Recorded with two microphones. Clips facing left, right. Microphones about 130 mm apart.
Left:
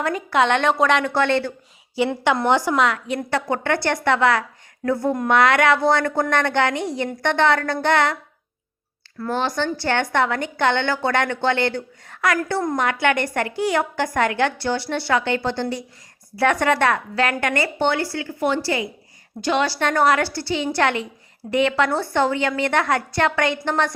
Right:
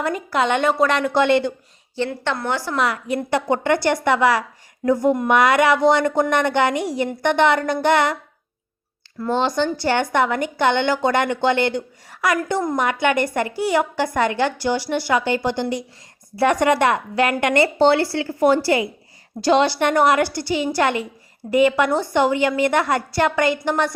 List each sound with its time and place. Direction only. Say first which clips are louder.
0.0 s a woman's voice: left 1 dB; centre (ahead or behind)
1.1 s a woman's voice: right 3 dB; 15° right (ahead or behind)
2.2 s a woman's voice: left 5 dB; 20° left (ahead or behind)
2.7 s a woman's voice: left 1 dB; 5° right (ahead or behind)
3.2 s a woman's voice: right 3 dB; 15° right (ahead or behind)
12.4 s a woman's voice: right 1 dB; 20° right (ahead or behind)
12.6 s a woman's voice: even; 5° right (ahead or behind)
14.6 s a woman's voice: right 2 dB; 10° right (ahead or behind); by 19.6 s 35° right (ahead or behind)
19.6 s a woman's voice: right 2 dB; 20° right (ahead or behind)